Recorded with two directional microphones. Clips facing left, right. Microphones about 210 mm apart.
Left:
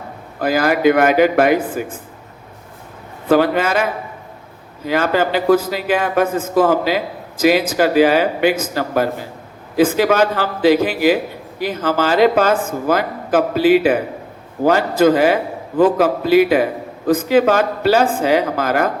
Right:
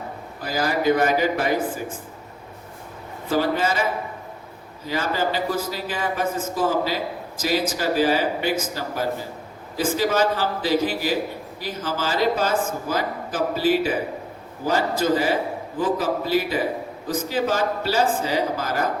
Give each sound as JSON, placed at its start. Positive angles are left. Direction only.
{"t": 0.3, "sound": "a man's voice", "side_deg": 65}
{"t": 3.2, "sound": "a man's voice", "side_deg": 65}
{"t": 4.9, "sound": "a man's voice", "side_deg": 65}